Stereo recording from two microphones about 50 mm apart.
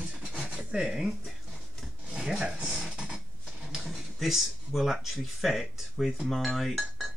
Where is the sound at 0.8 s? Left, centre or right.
Centre.